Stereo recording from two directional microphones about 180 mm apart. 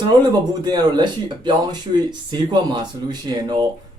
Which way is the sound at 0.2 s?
25° right (ahead or behind).